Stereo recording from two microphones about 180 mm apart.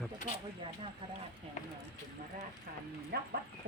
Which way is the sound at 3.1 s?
60° right (ahead or behind).